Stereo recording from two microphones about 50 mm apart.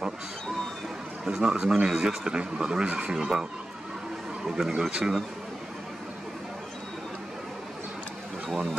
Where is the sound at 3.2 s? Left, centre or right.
Centre.